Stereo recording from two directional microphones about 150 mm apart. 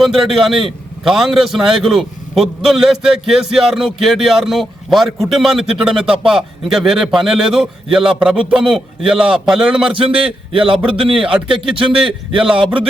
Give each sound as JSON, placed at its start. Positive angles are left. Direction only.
{"t": 0.0, "sound": "a man's voice", "side_deg": 0}
{"t": 9.9, "sound": "a man's voice", "side_deg": -35}
{"t": 11.3, "sound": "a man's voice", "side_deg": -5}
{"t": 11.9, "sound": "a man's voice", "side_deg": -35}